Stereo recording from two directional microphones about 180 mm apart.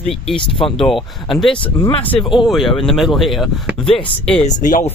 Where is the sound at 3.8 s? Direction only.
30° left (ahead or behind).